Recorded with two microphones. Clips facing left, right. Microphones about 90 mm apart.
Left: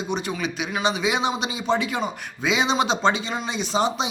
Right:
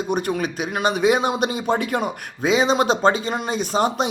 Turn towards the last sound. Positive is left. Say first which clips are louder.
# right 3 dB
turn(degrees=-50)  # may be behind; listen again after turning